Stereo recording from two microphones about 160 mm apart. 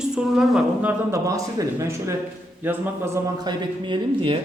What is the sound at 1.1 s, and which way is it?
A man's voice, 20° right (ahead or behind).